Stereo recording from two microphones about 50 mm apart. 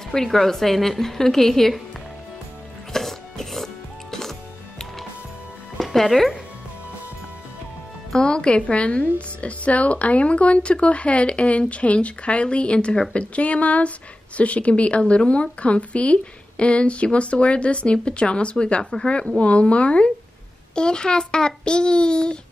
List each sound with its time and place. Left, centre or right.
0.1 s a woman's voice: centre
2.9 s music: centre
8.1 s a woman's voice: centre